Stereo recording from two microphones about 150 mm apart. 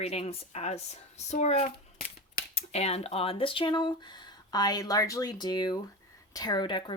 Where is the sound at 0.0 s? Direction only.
45° left (ahead or behind).